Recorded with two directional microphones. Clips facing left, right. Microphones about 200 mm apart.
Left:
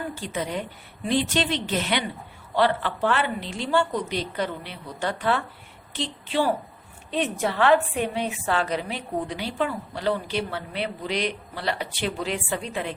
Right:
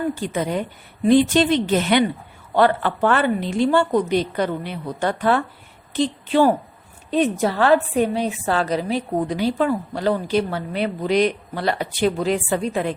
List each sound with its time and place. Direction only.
0.2 s a woman's voice: 45° right (ahead or behind)